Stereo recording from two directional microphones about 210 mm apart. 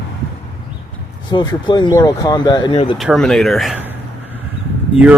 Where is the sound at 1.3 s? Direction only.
20° left (ahead or behind).